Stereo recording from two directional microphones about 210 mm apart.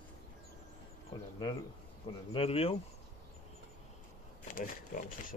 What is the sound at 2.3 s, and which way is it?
Speech, 30° left (ahead or behind).